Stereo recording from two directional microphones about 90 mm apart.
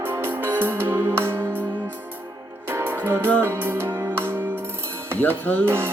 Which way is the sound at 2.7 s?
25° right (ahead or behind).